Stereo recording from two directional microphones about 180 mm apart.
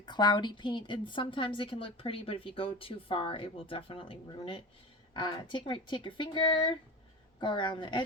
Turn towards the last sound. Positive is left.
turn(degrees=25)  # may be behind; listen again after turning